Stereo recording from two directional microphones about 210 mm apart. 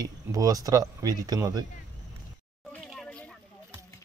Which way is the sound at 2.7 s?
5° left (ahead or behind).